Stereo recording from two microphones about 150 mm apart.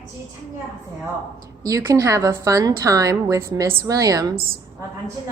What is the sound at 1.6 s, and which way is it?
A woman's voice, 20° right (ahead or behind).